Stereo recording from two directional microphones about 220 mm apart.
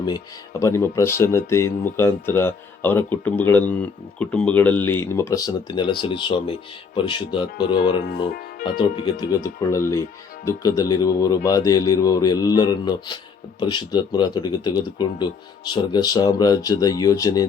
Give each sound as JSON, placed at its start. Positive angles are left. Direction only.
{"t": 0.6, "sound": "speech", "side_deg": 15}
{"t": 8.8, "sound": "speech", "side_deg": 20}